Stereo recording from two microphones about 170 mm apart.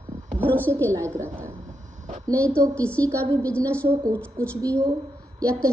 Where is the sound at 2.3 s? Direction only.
10° left (ahead or behind).